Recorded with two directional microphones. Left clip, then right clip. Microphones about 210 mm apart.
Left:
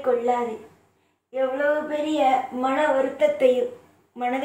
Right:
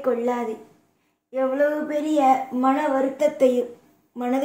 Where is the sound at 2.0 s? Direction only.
60° right (ahead or behind).